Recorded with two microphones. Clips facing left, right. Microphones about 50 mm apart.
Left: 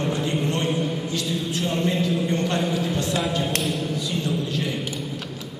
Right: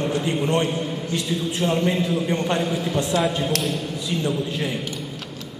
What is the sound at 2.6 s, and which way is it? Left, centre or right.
Speech, centre.